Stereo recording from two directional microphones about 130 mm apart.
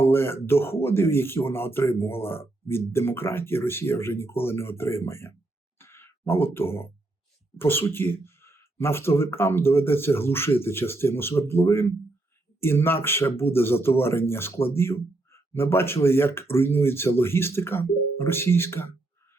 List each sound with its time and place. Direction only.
0.0 s speech: 20° left (ahead or behind)
5.8 s a sound: 20° left (ahead or behind)
7.6 s speech: 15° left (ahead or behind)